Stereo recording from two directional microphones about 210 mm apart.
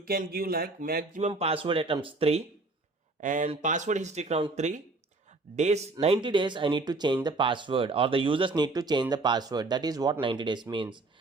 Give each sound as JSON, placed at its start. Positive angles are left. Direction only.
{"t": 0.0, "sound": "speech", "side_deg": -45}
{"t": 1.3, "sound": "speech", "side_deg": -25}